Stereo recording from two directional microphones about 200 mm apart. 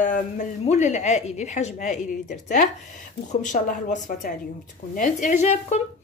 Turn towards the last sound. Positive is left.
turn(degrees=35)  # may be behind; listen again after turning